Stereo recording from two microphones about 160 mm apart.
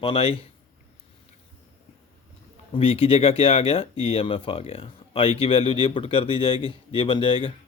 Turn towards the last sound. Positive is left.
turn(degrees=30)  # may be behind; listen again after turning